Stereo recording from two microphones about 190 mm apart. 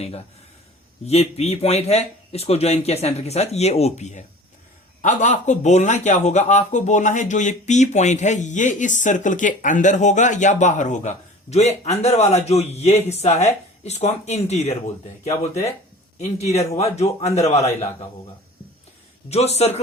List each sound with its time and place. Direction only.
1.0 s a man's voice: 35° left (ahead or behind)
16.1 s a man's voice: 35° left (ahead or behind)
19.3 s a man's voice: 35° left (ahead or behind)